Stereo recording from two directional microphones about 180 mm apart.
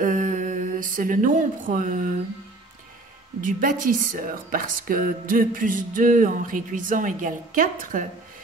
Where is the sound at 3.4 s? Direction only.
50° right (ahead or behind).